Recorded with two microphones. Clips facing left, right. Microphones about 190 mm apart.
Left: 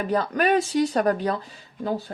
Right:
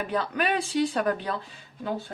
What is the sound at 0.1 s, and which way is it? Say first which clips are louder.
Speech: left 7 dB; 40° left (ahead or behind).